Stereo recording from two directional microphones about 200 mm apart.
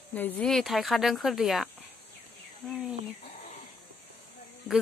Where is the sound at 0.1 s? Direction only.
10° left (ahead or behind).